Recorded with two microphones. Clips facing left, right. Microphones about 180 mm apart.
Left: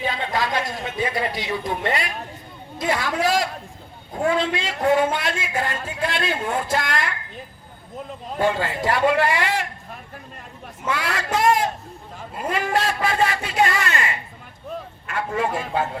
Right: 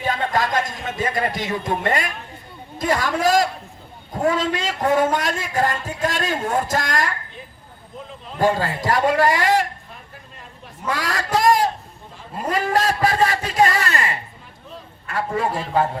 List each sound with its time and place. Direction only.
0.1 s a sound: 45° right (ahead or behind)
2.7 s a man's voice: 45° right (ahead or behind)
8.4 s a man's voice: 40° right (ahead or behind)
10.8 s speech: 40° right (ahead or behind)
12.5 s a sound: 40° right (ahead or behind)
15.0 s a man's voice: 35° right (ahead or behind)